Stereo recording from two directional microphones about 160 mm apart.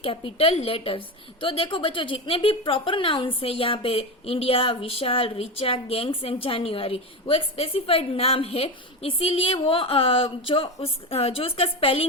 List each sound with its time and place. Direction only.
0.0 s a woman's voice: 35° left (ahead or behind)